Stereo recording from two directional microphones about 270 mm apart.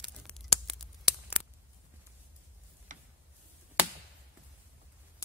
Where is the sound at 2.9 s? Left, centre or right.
Right.